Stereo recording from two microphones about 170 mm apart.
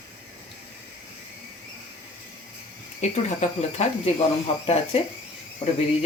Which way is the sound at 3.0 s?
40° left (ahead or behind).